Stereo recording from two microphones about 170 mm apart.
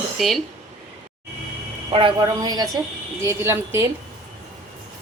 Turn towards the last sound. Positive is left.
turn(degrees=-15)  # may be behind; listen again after turning